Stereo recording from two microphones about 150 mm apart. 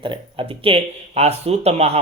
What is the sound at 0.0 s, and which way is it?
Speech, 35° right (ahead or behind).